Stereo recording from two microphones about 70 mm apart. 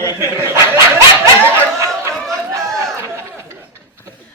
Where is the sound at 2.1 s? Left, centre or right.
Centre.